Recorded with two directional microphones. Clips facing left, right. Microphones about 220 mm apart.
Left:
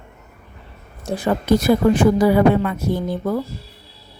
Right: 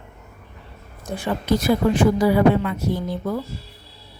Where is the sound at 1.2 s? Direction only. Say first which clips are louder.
Left 4 dB; 50° left (ahead or behind).